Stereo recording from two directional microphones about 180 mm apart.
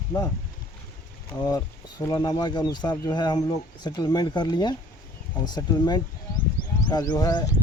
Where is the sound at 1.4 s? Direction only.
20° left (ahead or behind).